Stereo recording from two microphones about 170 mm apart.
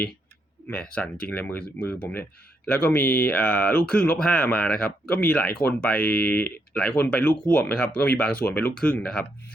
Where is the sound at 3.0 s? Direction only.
60° left (ahead or behind).